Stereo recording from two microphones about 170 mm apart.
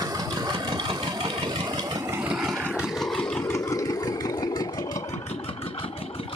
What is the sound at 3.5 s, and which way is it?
Vehicle, 20° left (ahead or behind).